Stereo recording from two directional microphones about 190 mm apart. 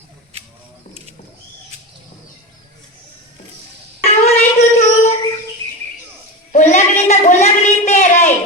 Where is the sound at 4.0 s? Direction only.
35° left (ahead or behind).